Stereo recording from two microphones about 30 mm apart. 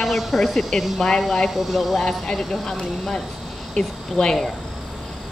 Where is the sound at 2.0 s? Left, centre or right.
Left.